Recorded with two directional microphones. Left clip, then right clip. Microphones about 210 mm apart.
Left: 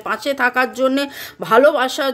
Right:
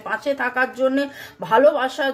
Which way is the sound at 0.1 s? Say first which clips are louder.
Left 4 dB; 40° left (ahead or behind).